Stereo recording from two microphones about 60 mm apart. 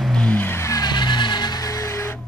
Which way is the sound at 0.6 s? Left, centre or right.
Left.